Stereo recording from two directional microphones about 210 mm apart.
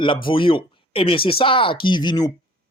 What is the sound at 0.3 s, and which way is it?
Speech, 25° left (ahead or behind).